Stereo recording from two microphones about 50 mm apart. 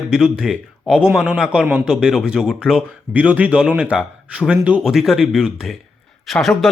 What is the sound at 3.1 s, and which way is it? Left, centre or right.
Speech, right.